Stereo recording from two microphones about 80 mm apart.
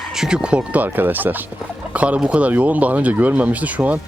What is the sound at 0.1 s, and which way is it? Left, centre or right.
Speech, centre.